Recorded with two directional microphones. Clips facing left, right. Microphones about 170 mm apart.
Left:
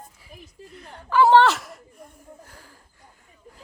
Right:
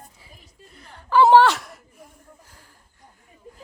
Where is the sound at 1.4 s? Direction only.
Centre (ahead or behind).